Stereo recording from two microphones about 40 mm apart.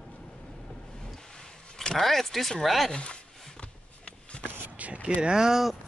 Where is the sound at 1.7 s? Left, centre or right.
Centre.